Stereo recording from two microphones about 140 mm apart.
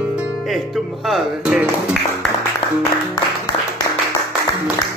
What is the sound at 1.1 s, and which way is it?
Music, 5° right (ahead or behind).